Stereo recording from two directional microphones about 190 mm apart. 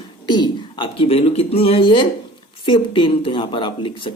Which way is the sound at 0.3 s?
25° left (ahead or behind).